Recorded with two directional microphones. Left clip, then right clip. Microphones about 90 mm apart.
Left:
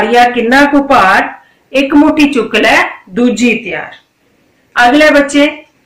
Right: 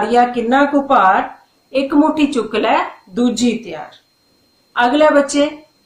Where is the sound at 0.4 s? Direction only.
30° right (ahead or behind).